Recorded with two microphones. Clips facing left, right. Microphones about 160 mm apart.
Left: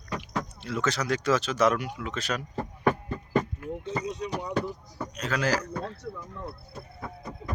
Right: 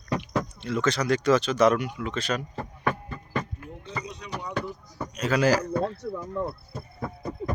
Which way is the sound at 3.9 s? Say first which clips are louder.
Left 4 dB; 50° left (ahead or behind).